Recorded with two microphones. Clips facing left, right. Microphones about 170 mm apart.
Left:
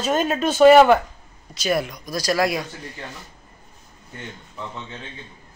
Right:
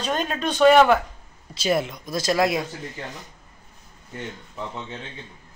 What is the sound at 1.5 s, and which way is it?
Speech, 25° right (ahead or behind).